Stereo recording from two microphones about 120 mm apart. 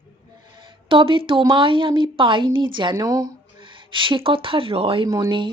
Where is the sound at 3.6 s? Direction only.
45° right (ahead or behind).